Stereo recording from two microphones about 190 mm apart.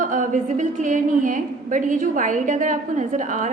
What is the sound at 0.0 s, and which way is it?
A woman's voice, 45° right (ahead or behind).